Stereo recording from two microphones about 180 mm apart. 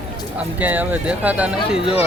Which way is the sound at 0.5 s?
10° right (ahead or behind).